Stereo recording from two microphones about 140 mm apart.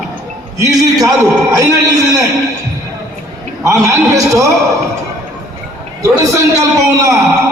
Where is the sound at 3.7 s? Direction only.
20° right (ahead or behind).